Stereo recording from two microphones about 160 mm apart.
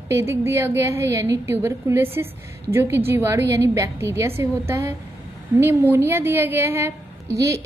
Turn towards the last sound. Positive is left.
turn(degrees=-20)  # may be behind; listen again after turning